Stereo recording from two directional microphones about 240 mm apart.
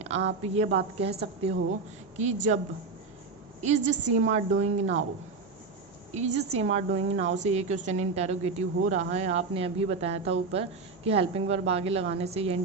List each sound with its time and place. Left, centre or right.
0.3 s a woman's voice: right
3.6 s a woman's voice: right
6.1 s a woman's voice: right